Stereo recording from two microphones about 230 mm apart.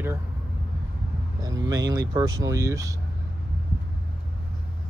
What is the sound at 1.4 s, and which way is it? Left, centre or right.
Speech, centre.